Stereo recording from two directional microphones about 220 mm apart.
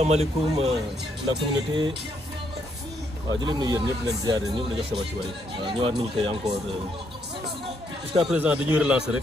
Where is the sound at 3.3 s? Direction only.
20° right (ahead or behind).